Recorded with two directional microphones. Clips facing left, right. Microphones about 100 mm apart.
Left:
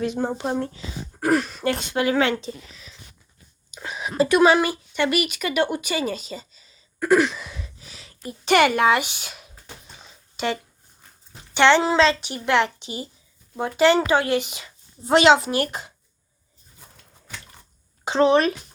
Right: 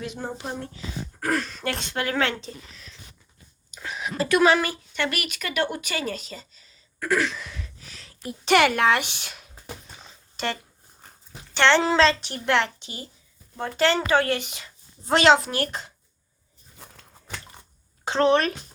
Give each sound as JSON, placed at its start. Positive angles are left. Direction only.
{"t": 0.0, "sound": "speech", "side_deg": 30}
{"t": 1.2, "sound": "speech", "side_deg": 15}
{"t": 1.6, "sound": "speech", "side_deg": 5}
{"t": 3.8, "sound": "a sound", "side_deg": 20}
{"t": 4.2, "sound": "speech", "side_deg": 20}
{"t": 7.0, "sound": "a sound", "side_deg": 15}
{"t": 8.0, "sound": "speech", "side_deg": 0}
{"t": 12.8, "sound": "speech", "side_deg": 20}
{"t": 18.0, "sound": "speech", "side_deg": 10}